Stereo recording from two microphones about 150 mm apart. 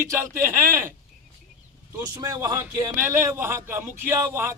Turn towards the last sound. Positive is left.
turn(degrees=-15)  # may be behind; listen again after turning